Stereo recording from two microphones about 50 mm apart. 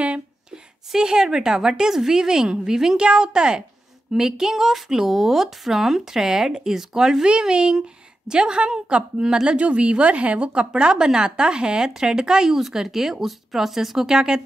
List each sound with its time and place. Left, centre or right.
0.9 s a woman's voice: centre